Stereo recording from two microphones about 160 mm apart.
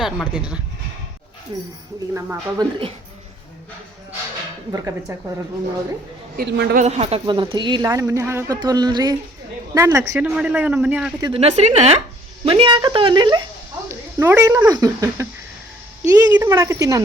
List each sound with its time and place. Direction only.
0.0 s speech: 5° right (ahead or behind)
2.1 s speech: 20° right (ahead or behind)
4.7 s speech: 20° right (ahead or behind)
6.3 s speech: 85° right
6.8 s a woman's voice: 40° right (ahead or behind); by 11.1 s 5° right (ahead or behind)
11.3 s speech: 45° right (ahead or behind)
12.5 s a woman's voice: 30° right (ahead or behind)
13.8 s speech: 15° right (ahead or behind)